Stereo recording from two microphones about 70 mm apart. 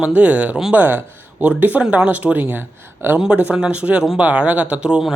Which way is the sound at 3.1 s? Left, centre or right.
Centre.